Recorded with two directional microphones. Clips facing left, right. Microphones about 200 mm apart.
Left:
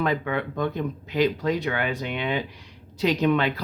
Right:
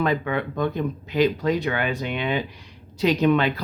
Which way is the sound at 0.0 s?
20° right (ahead or behind).